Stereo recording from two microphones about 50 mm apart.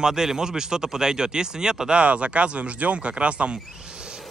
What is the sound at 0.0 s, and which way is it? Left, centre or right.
A man's voice, centre.